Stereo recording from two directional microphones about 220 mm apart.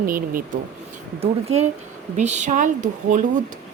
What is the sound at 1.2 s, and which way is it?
A woman's voice, 30° right (ahead or behind).